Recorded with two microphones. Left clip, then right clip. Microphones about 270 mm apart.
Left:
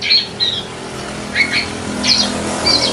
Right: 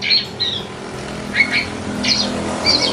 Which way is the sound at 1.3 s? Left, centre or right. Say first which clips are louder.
Left 1 dB; centre.